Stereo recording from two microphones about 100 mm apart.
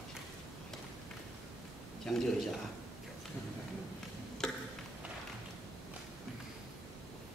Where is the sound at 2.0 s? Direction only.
Centre (ahead or behind).